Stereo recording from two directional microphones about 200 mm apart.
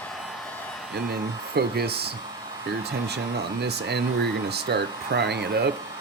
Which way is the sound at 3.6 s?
55° right (ahead or behind).